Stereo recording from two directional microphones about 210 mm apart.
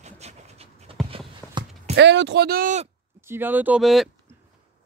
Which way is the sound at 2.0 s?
55° right (ahead or behind).